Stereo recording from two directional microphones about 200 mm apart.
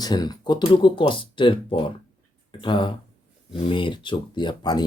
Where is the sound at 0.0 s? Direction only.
20° left (ahead or behind).